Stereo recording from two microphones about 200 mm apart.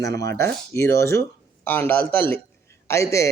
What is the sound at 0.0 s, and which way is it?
A man's voice, 15° left (ahead or behind).